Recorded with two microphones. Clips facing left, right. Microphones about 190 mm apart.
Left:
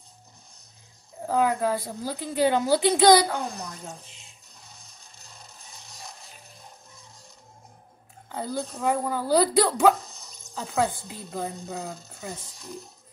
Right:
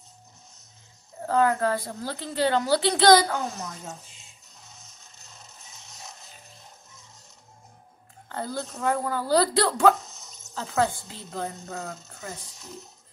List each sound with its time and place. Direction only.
1.2 s a woman's voice: 10° left (ahead or behind)
3.3 s a child's voice: centre (ahead or behind)
5.0 s music: 35° left (ahead or behind)
8.3 s a woman's voice: 10° left (ahead or behind)
10.6 s a child's voice: centre (ahead or behind)
11.6 s a woman's voice: 15° left (ahead or behind)